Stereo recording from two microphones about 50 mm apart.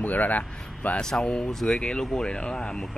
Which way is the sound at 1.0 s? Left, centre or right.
Centre.